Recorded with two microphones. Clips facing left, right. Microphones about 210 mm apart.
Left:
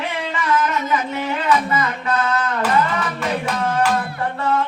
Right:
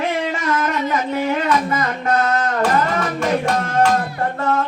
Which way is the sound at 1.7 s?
45° right (ahead or behind).